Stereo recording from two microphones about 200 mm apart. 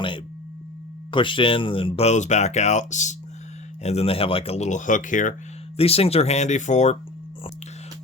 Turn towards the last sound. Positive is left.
turn(degrees=35)  # may be behind; listen again after turning